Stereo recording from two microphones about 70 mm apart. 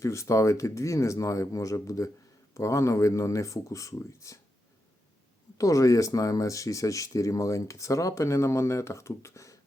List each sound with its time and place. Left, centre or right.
0.0 s speech: left
5.5 s speech: left